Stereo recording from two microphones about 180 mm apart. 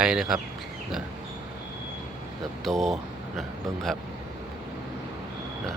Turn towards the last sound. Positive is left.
turn(degrees=0)  # may be behind; listen again after turning